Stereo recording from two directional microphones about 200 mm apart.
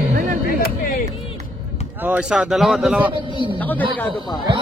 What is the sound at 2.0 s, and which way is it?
A man's voice, 5° right (ahead or behind).